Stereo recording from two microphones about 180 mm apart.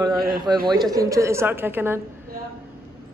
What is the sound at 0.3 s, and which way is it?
A man's voice, 25° right (ahead or behind).